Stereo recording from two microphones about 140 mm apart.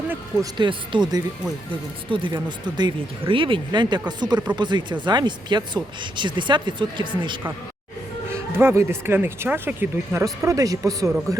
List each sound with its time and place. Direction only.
0.5 s speech: 35° right (ahead or behind)
8.3 s speech: 20° right (ahead or behind)